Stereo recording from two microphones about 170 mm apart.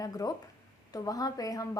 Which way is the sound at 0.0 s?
20° left (ahead or behind).